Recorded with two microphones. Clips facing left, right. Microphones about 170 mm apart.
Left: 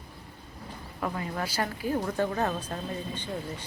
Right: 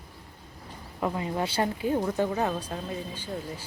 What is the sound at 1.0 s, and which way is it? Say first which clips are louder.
A woman's voice: right 3 dB; 20° right (ahead or behind).